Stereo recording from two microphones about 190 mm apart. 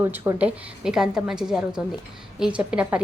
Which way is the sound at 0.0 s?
10° right (ahead or behind).